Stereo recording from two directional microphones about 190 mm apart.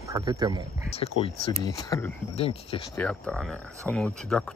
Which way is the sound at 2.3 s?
30° left (ahead or behind).